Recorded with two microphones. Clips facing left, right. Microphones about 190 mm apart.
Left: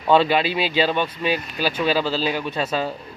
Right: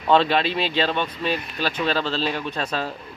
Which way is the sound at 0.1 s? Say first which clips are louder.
Left 1 dB; 5° left (ahead or behind).